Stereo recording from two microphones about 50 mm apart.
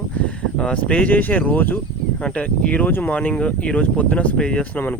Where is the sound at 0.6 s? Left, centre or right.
Left.